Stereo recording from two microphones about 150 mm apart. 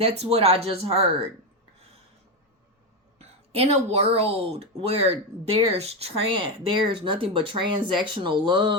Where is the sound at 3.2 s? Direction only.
45° right (ahead or behind).